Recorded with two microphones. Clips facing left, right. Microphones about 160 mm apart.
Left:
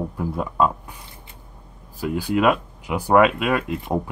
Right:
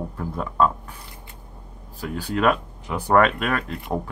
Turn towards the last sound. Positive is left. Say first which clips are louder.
# left 3 dB
turn(degrees=10)  # may be behind; listen again after turning